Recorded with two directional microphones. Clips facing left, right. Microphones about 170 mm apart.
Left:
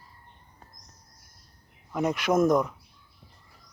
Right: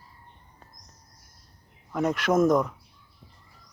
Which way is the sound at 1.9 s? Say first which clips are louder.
Right 1 dB; 5° left (ahead or behind).